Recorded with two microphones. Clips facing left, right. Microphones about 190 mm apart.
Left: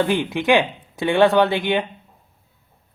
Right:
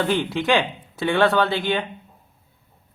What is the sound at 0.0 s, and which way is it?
Speech, 15° left (ahead or behind).